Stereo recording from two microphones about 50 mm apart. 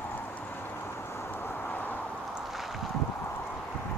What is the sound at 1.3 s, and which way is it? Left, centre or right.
Vehicle, left.